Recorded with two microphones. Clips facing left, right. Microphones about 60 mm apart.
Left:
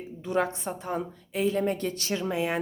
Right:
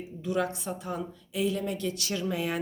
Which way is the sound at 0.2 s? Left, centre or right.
Left.